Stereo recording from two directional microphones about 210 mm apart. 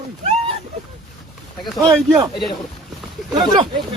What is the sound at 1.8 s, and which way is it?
Speech, centre (ahead or behind).